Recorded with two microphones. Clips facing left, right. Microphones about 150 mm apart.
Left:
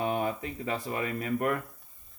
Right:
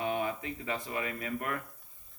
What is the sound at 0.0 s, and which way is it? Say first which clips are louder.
Speech: left 3 dB; 40° left (ahead or behind).